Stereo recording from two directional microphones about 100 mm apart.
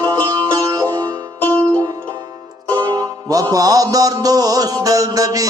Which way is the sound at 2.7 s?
30° right (ahead or behind).